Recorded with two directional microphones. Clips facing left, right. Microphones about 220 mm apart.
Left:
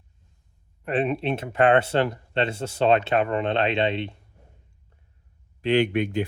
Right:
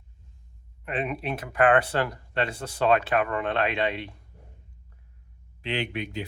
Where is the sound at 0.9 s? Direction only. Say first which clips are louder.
Left 6 dB; 30° left (ahead or behind).